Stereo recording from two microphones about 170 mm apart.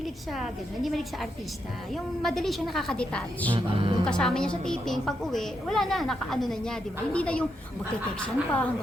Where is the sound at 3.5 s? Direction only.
30° right (ahead or behind).